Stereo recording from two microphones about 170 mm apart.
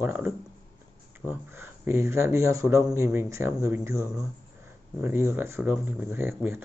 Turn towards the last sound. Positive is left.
turn(degrees=-15)  # may be behind; listen again after turning